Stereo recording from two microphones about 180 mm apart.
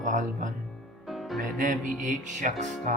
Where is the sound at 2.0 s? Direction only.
45° right (ahead or behind).